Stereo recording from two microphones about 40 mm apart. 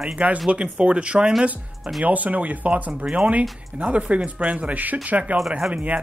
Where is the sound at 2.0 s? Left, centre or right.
Right.